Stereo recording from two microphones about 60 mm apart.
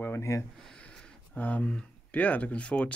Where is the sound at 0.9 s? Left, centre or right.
Centre.